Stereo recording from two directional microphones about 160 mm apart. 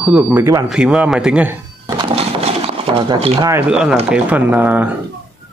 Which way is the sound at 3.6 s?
5° right (ahead or behind).